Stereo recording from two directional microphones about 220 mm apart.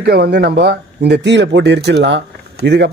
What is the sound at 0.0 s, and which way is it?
Speech, 45° right (ahead or behind).